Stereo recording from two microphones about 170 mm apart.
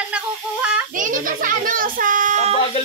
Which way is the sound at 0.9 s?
50° right (ahead or behind).